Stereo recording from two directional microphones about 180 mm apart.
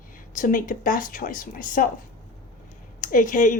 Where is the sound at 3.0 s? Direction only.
50° left (ahead or behind).